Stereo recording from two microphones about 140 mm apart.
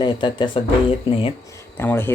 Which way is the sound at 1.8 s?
15° left (ahead or behind).